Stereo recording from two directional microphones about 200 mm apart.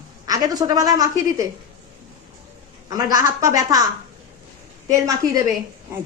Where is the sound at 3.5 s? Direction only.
15° right (ahead or behind).